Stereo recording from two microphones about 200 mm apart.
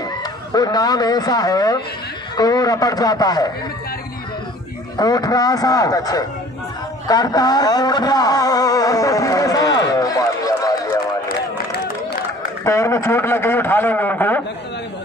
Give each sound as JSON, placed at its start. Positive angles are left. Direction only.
{"t": 0.0, "sound": "a man's voice", "side_deg": 20}
{"t": 4.9, "sound": "a man's voice", "side_deg": 20}
{"t": 7.1, "sound": "a sound", "side_deg": 20}
{"t": 12.6, "sound": "speech", "side_deg": 15}